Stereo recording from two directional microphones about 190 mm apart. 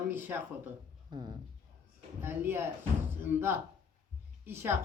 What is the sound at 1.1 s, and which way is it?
Speech, 20° right (ahead or behind).